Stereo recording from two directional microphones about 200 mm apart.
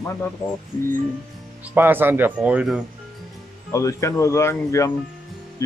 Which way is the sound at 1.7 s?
10° right (ahead or behind).